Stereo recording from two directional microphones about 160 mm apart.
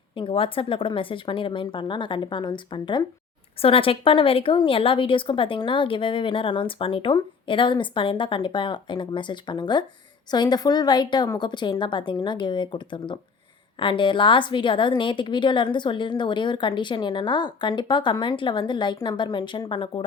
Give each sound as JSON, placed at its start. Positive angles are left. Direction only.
{"t": 0.2, "sound": "a woman's voice", "side_deg": 35}